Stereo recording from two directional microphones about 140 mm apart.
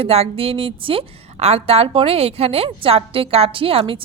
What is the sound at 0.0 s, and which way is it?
A woman's voice, 45° right (ahead or behind).